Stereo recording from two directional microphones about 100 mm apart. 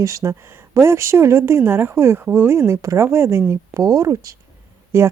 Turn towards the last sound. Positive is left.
turn(degrees=-30)  # may be behind; listen again after turning